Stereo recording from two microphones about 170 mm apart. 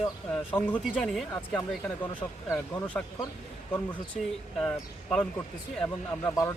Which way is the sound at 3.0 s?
5° left (ahead or behind).